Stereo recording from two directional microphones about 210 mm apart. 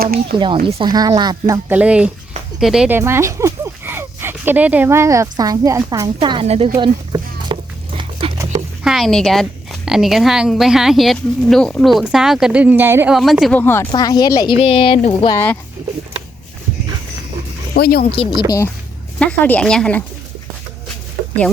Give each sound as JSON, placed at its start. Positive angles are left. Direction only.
{"t": 0.0, "sound": "speech", "side_deg": -45}
{"t": 0.6, "sound": "speech", "side_deg": -25}
{"t": 1.7, "sound": "a woman's voice", "side_deg": -5}
{"t": 6.7, "sound": "a sound", "side_deg": -20}
{"t": 8.8, "sound": "a woman's voice", "side_deg": 0}
{"t": 17.7, "sound": "speech", "side_deg": 50}
{"t": 19.2, "sound": "speech", "side_deg": 5}